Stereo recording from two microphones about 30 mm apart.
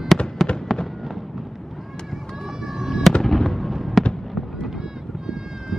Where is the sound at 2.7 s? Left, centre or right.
Centre.